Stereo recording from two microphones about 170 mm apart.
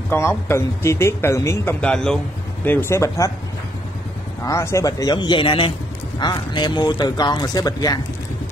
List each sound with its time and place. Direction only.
0.1 s speech: 15° left (ahead or behind)
4.5 s speech: 15° left (ahead or behind)